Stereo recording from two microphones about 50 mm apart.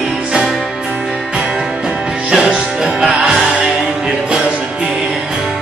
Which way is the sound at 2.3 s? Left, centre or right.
Right.